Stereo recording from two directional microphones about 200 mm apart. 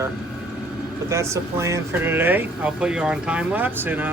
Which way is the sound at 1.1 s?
15° right (ahead or behind).